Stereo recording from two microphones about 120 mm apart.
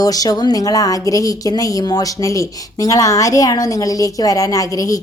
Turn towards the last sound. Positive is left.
turn(degrees=30)  # may be behind; listen again after turning